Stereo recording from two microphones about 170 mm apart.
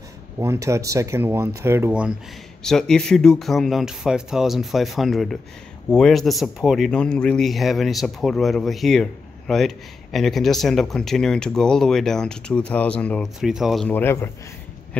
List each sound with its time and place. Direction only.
0.4 s speech: 15° right (ahead or behind)
2.6 s speech: 5° left (ahead or behind)
13.8 s speech: 10° left (ahead or behind)